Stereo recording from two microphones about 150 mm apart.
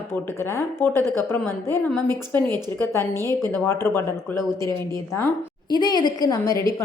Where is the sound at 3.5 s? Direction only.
15° left (ahead or behind).